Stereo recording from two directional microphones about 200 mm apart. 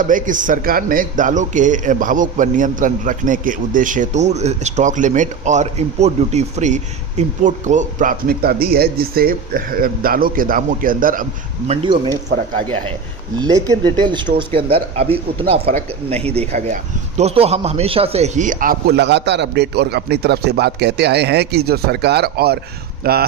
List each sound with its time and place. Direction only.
0.0 s a man's voice: 40° right (ahead or behind)
11.7 s speech: 25° right (ahead or behind)
13.4 s a man's voice: 20° right (ahead or behind); by 23.2 s 50° right (ahead or behind)